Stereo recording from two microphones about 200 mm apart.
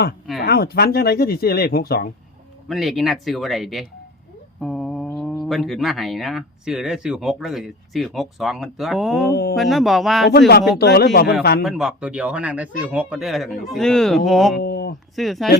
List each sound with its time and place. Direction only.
0.3 s speech: 50° left (ahead or behind)
2.6 s speech: centre (ahead or behind)
9.3 s speech: 50° left (ahead or behind)
9.6 s speech: centre (ahead or behind)
10.8 s speech: 55° left (ahead or behind)
11.6 s speech: centre (ahead or behind)
14.6 s a sound: 50° left (ahead or behind)
15.1 s speech: centre (ahead or behind)